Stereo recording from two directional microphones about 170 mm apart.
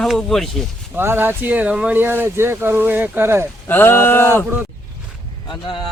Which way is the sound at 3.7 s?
10° left (ahead or behind).